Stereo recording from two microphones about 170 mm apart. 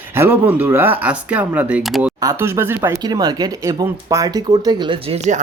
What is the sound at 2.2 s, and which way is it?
Speech, 15° right (ahead or behind).